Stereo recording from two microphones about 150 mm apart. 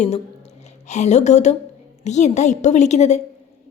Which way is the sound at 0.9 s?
50° left (ahead or behind).